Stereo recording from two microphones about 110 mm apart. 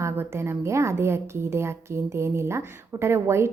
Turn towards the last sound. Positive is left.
turn(degrees=-25)  # may be behind; listen again after turning